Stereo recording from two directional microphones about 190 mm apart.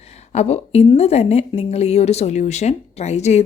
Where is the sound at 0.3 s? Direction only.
35° left (ahead or behind).